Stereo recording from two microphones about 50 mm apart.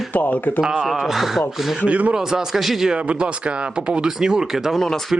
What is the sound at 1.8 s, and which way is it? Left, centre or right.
Speech, right.